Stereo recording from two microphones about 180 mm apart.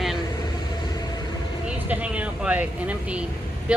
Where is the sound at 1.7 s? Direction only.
5° right (ahead or behind).